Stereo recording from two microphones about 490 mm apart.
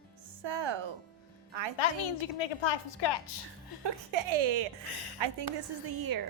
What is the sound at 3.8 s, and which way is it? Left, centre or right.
Speech, right.